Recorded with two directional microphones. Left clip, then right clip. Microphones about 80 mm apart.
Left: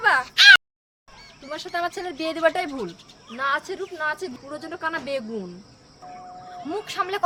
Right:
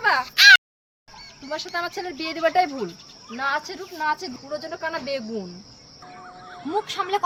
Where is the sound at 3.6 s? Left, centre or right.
Left.